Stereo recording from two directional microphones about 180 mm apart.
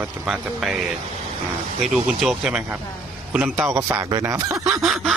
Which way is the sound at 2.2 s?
5° right (ahead or behind).